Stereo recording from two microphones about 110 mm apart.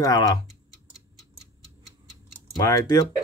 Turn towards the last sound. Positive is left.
turn(degrees=35)  # may be behind; listen again after turning